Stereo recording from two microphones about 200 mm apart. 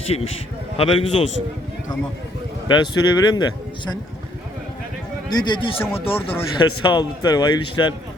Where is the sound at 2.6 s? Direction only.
20° left (ahead or behind).